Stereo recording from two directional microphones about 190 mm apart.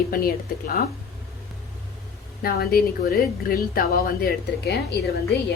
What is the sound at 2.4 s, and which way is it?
A woman's voice, 50° left (ahead or behind).